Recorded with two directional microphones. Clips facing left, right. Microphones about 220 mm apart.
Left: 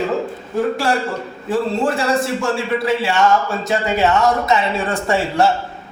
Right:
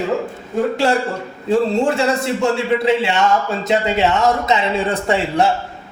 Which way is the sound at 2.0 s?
20° right (ahead or behind).